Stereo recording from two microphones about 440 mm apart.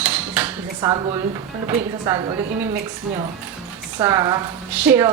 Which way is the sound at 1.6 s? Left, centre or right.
Centre.